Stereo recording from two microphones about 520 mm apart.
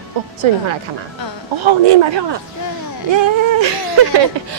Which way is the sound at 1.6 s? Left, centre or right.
Right.